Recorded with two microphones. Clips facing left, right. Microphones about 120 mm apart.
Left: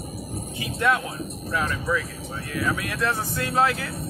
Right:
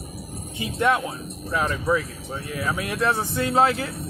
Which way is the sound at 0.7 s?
20° right (ahead or behind).